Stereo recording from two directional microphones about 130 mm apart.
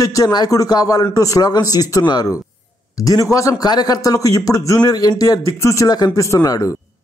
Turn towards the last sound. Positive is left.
turn(degrees=25)  # may be behind; listen again after turning